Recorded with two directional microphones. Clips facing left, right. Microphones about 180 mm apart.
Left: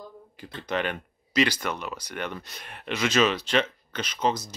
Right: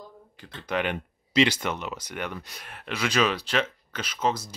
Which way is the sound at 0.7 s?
15° right (ahead or behind).